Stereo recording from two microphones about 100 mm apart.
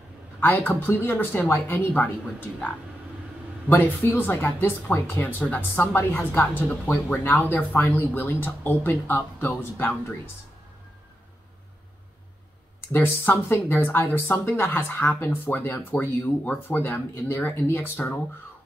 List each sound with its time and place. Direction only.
0.4 s speech: 20° left (ahead or behind)
3.6 s speech: 20° left (ahead or behind)
12.9 s speech: 20° left (ahead or behind)